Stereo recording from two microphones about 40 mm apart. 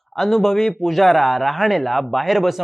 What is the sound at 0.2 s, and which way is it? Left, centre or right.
Speech, centre.